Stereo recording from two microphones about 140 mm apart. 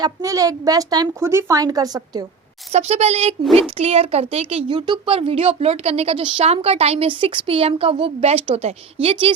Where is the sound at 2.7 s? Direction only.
50° right (ahead or behind).